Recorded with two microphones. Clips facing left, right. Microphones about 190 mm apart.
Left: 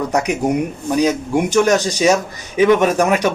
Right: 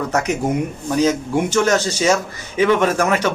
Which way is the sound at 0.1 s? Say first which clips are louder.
Left 2 dB; 15° left (ahead or behind).